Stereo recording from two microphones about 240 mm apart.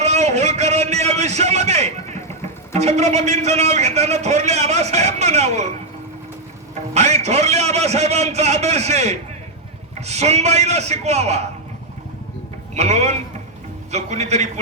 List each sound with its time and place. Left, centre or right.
0.0 s a man's voice: right
6.9 s a man's voice: right
12.7 s a man's voice: right